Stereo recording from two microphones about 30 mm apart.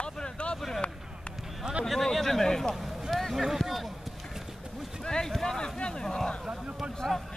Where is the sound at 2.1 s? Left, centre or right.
Centre.